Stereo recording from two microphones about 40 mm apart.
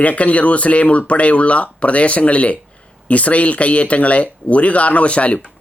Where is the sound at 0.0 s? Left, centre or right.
Left.